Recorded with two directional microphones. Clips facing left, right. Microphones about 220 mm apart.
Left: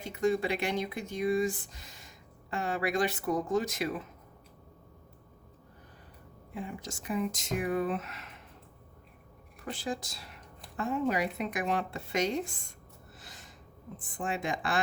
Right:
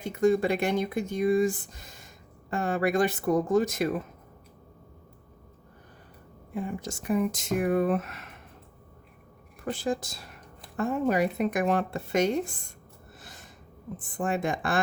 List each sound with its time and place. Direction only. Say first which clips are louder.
0.0 s speech: right 6 dB; 50° right (ahead or behind)
6.5 s speech: right 6 dB; 50° right (ahead or behind)
9.7 s speech: right 6 dB; 50° right (ahead or behind)
13.2 s snort: right 3 dB; 50° right (ahead or behind)
14.2 s speech: right 5 dB; 50° right (ahead or behind)